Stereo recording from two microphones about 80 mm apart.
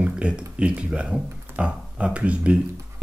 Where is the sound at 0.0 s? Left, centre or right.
Centre.